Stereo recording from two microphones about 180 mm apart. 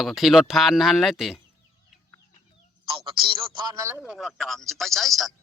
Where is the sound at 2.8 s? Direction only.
25° right (ahead or behind).